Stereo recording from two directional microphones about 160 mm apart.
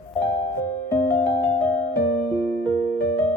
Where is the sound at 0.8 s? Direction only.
15° left (ahead or behind).